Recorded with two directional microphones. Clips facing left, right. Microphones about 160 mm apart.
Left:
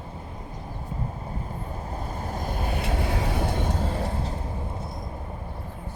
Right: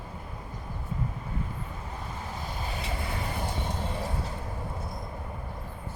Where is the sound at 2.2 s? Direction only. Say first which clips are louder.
Left 7 dB; 45° left (ahead or behind); by 3.6 s 75° left (ahead or behind).